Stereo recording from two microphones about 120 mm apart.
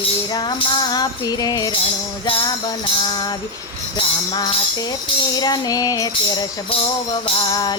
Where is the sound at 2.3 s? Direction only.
45° left (ahead or behind).